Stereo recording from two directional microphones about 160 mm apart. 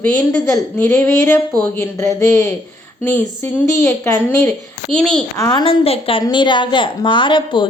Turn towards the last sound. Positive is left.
turn(degrees=30)  # may be behind; listen again after turning